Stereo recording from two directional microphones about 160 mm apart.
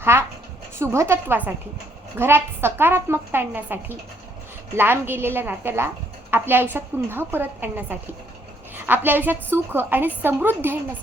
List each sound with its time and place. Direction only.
0.0 s a woman's voice: 15° right (ahead or behind)